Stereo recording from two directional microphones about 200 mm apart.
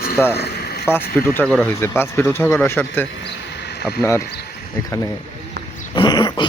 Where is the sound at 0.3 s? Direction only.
50° left (ahead or behind).